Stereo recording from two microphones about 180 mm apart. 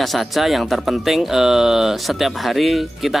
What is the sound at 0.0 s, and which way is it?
Speech, centre (ahead or behind).